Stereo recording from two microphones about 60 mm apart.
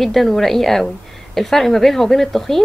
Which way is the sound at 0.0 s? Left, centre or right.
Centre.